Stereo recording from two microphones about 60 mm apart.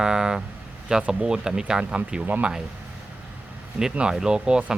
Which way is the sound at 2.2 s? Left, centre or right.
Right.